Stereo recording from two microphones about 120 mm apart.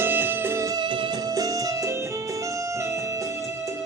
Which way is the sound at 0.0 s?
15° right (ahead or behind).